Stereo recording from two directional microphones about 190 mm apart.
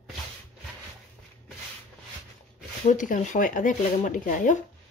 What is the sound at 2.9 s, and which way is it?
Speech, 40° left (ahead or behind).